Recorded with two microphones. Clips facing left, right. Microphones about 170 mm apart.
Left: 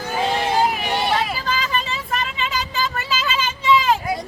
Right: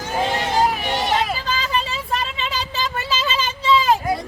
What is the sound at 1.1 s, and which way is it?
Vehicle, 30° right (ahead or behind).